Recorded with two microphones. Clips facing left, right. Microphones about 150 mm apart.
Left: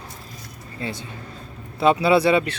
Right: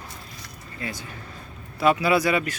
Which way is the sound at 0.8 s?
30° left (ahead or behind).